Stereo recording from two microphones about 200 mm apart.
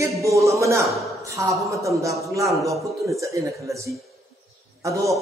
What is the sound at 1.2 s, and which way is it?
A man's voice, 15° right (ahead or behind).